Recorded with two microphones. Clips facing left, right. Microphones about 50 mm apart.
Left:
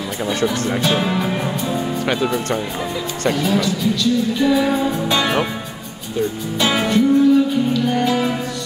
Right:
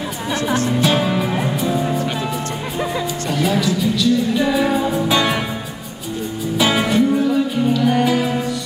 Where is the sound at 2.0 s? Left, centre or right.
Left.